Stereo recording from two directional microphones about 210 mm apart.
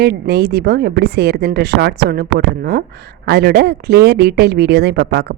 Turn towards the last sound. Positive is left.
turn(degrees=-50)  # may be behind; listen again after turning